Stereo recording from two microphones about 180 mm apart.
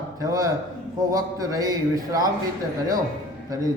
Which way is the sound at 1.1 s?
20° right (ahead or behind).